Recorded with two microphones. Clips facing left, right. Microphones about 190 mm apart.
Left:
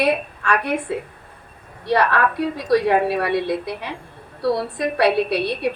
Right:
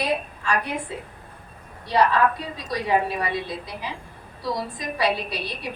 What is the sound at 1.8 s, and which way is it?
A woman's voice, 65° left (ahead or behind).